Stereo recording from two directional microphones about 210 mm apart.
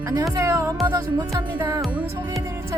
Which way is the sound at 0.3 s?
15° right (ahead or behind).